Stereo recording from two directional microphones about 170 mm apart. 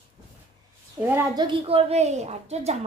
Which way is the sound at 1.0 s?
15° right (ahead or behind).